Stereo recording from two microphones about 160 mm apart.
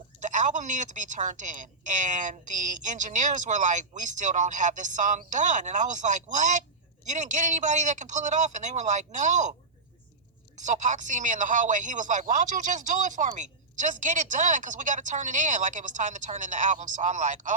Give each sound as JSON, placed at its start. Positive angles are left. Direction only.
{"t": 0.2, "sound": "a woman's voice", "side_deg": -50}
{"t": 10.6, "sound": "a woman's voice", "side_deg": -50}